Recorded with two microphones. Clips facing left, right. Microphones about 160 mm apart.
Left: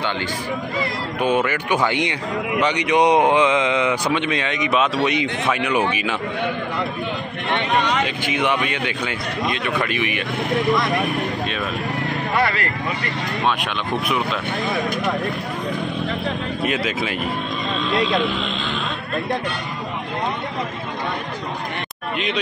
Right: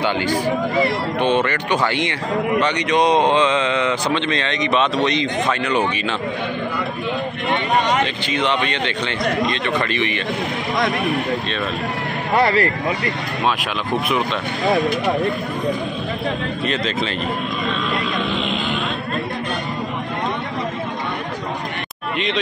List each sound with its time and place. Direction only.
1.2 s speech: 5° left (ahead or behind)
8.0 s speech: 10° left (ahead or behind)
12.4 s speech: 35° right (ahead or behind)
16.6 s speech: 10° left (ahead or behind)